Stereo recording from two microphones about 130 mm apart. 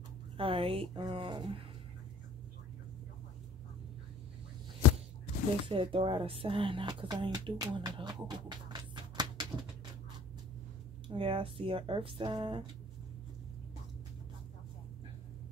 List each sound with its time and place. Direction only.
0.4 s speech: 45° right (ahead or behind)
5.7 s a woman's voice: 45° right (ahead or behind)
11.1 s speech: 45° right (ahead or behind)